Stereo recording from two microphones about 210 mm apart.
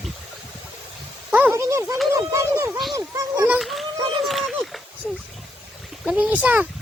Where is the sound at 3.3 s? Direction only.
10° right (ahead or behind).